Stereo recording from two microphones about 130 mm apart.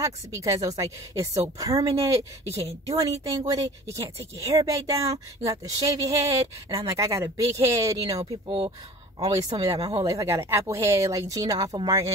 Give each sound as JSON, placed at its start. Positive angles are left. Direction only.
{"t": 0.0, "sound": "speech", "side_deg": -25}
{"t": 8.5, "sound": "speech", "side_deg": -40}